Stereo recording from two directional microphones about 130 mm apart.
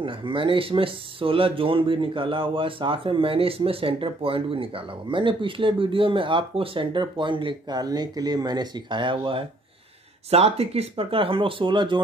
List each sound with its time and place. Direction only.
0.0 s speech: 40° right (ahead or behind)
10.3 s speech: 50° right (ahead or behind)